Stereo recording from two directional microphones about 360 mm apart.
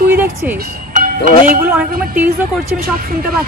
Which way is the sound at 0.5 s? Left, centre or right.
Right.